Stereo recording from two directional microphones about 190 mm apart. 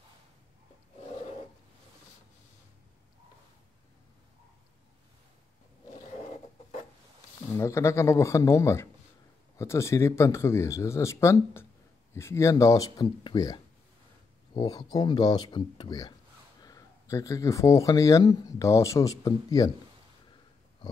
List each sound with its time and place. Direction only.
7.5 s speech: 15° left (ahead or behind)